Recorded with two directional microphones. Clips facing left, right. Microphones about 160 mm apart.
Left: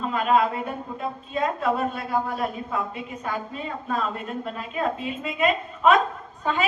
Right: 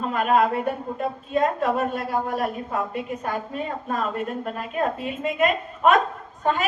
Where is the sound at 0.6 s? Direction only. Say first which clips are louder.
Right 4 dB; 50° right (ahead or behind).